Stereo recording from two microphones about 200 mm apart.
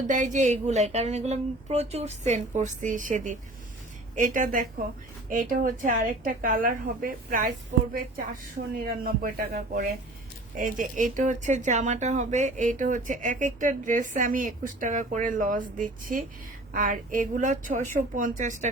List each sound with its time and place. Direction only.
0.1 s a woman's voice: 40° right (ahead or behind)
9.0 s a woman's voice: 45° right (ahead or behind)